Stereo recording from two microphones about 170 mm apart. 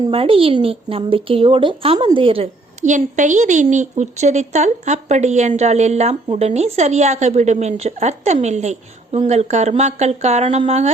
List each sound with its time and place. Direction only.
0.1 s a woman's voice: 35° right (ahead or behind)
2.8 s a woman's voice: 45° right (ahead or behind)